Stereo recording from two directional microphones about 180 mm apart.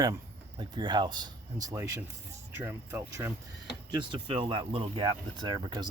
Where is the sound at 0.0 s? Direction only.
25° right (ahead or behind).